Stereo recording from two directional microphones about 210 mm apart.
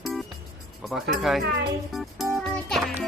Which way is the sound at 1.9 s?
Centre (ahead or behind).